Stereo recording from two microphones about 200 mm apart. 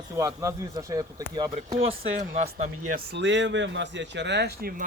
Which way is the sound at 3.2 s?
60° right (ahead or behind).